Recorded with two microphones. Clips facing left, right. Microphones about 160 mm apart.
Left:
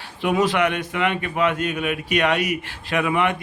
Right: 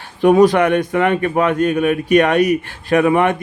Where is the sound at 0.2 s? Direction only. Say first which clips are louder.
Right 9 dB; 45° right (ahead or behind).